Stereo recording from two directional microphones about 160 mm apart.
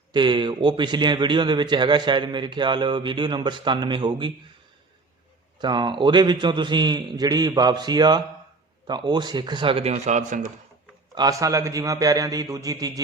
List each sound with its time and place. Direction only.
0.1 s a man's voice: 30° right (ahead or behind)
5.5 s a man's voice: 30° right (ahead or behind); by 10.5 s 50° right (ahead or behind)
11.1 s a man's voice: 25° right (ahead or behind)